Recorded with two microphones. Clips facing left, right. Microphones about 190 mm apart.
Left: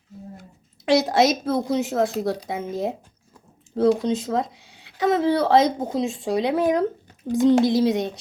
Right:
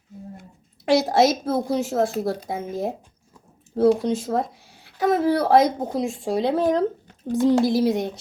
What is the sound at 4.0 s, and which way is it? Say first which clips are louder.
A child's voice: even; 20° left (ahead or behind).